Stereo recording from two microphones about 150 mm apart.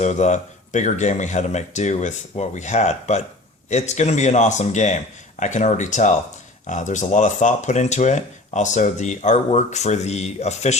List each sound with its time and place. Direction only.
0.0 s speech: 50° left (ahead or behind)